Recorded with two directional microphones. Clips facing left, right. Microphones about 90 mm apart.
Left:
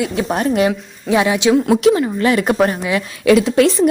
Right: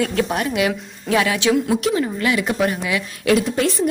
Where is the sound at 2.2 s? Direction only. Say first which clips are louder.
Left 7 dB; 40° left (ahead or behind).